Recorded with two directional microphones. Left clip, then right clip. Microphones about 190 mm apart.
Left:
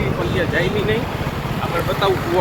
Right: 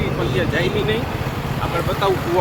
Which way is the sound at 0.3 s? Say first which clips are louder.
Left 1 dB; 15° right (ahead or behind).